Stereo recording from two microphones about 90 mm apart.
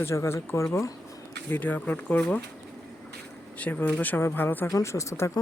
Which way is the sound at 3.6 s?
20° left (ahead or behind).